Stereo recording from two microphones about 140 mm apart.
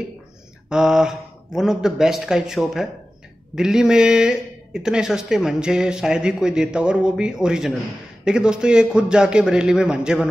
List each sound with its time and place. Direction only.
0.7 s speech: 5° right (ahead or behind)